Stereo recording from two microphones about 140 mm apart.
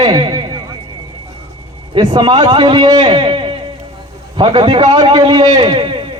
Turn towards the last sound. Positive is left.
turn(degrees=-35)  # may be behind; listen again after turning